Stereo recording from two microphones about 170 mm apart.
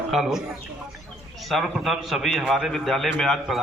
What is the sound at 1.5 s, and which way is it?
A woman's voice, centre (ahead or behind).